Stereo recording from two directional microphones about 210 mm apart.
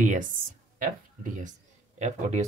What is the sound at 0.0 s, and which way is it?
Speech, 40° right (ahead or behind).